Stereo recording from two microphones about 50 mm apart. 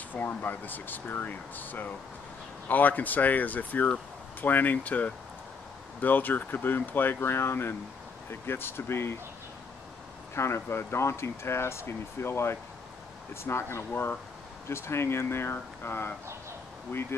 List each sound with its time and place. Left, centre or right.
0.1 s speech: left
10.3 s speech: left